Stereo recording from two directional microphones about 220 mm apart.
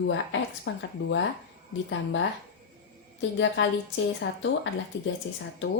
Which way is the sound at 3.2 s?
55° left (ahead or behind).